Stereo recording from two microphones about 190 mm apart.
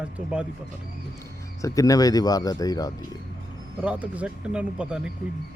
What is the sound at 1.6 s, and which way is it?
Speech, 15° left (ahead or behind).